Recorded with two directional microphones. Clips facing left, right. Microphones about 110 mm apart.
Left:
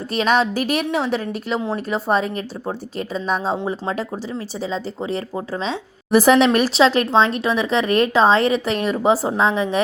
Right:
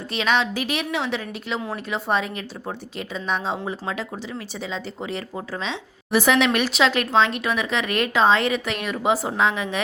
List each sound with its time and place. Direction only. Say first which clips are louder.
0.1 s a woman's voice: left 4 dB; 40° left (ahead or behind)